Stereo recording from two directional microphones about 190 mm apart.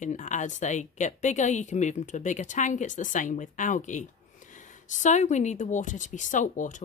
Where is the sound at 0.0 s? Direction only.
40° left (ahead or behind).